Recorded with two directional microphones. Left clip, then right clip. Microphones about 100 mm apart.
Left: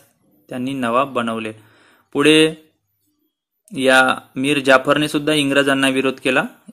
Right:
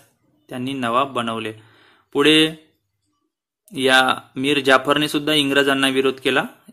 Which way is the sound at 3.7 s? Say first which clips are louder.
Left 2 dB; 30° left (ahead or behind).